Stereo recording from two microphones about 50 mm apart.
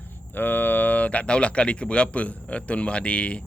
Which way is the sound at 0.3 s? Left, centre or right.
Left.